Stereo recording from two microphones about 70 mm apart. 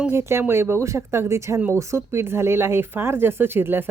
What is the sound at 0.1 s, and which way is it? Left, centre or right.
Speech, right.